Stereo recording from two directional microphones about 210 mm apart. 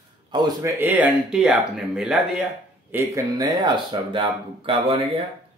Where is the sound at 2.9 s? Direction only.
15° right (ahead or behind).